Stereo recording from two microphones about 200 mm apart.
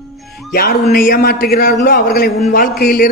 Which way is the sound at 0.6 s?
50° left (ahead or behind).